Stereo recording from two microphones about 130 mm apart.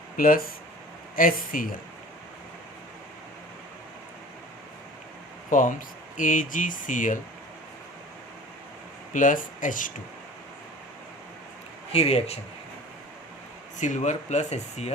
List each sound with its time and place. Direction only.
0.2 s speech: 90° left
5.5 s speech: 90° left
9.1 s speech: 90° left
11.9 s speech: 50° left (ahead or behind)
13.7 s speech: 70° left (ahead or behind)